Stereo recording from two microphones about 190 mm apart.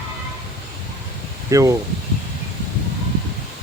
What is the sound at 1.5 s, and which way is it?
Speech, 15° right (ahead or behind).